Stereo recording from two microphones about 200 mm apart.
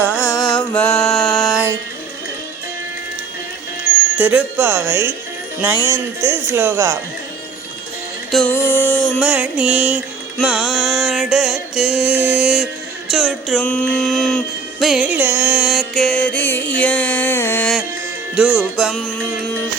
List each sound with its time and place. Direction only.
0.2 s music: 20° left (ahead or behind)
0.7 s music: 5° left (ahead or behind)
4.2 s speech: 5° right (ahead or behind)
8.3 s music: 5° left (ahead or behind)